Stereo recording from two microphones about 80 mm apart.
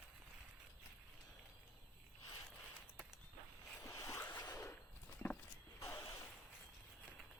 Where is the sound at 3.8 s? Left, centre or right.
Left.